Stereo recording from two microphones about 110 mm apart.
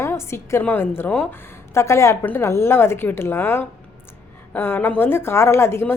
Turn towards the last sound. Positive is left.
turn(degrees=20)  # may be behind; listen again after turning